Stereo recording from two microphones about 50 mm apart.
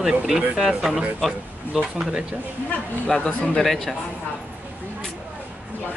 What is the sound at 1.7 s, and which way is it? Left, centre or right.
Speech, centre.